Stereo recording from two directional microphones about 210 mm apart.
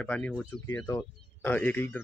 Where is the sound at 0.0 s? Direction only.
5° left (ahead or behind).